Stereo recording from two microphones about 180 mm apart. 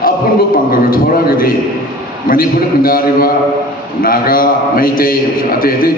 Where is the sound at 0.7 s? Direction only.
55° left (ahead or behind).